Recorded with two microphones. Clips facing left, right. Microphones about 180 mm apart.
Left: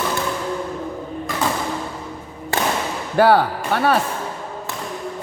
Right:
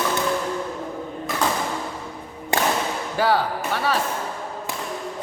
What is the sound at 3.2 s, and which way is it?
Speech, 60° left (ahead or behind).